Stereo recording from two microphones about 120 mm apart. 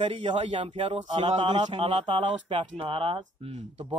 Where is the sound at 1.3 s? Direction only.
50° right (ahead or behind).